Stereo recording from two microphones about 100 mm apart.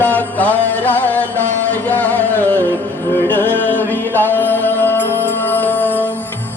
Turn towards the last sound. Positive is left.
turn(degrees=20)  # may be behind; listen again after turning